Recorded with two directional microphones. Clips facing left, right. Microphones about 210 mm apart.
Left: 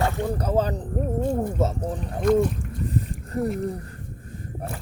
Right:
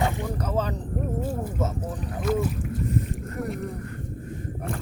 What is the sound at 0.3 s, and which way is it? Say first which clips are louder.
Speech: left 4 dB; 35° left (ahead or behind).